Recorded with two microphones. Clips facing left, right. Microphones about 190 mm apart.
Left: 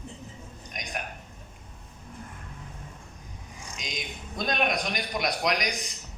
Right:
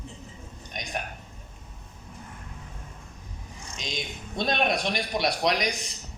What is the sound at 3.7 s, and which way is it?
A man's voice, 30° right (ahead or behind).